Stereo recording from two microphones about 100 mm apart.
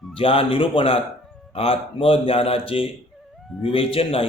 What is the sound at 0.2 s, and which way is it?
Speech, 65° left (ahead or behind).